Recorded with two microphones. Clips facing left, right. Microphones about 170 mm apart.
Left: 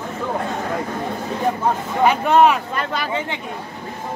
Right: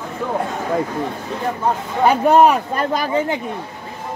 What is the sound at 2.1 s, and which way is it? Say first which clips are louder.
Speech: right 3 dB; 40° right (ahead or behind).